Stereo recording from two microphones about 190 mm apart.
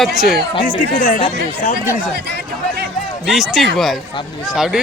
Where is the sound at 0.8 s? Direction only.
45° left (ahead or behind).